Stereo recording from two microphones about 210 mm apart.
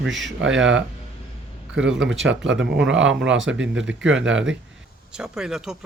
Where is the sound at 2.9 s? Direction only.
65° right (ahead or behind).